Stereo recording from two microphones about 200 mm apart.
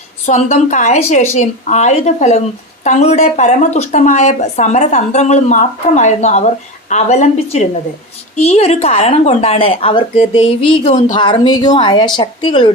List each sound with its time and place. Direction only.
0.3 s a woman's voice: 35° left (ahead or behind)